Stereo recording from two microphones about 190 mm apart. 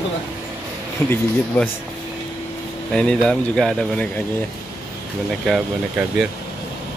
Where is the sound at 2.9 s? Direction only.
5° left (ahead or behind).